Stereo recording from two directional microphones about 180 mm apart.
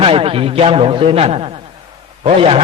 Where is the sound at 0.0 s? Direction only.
30° right (ahead or behind).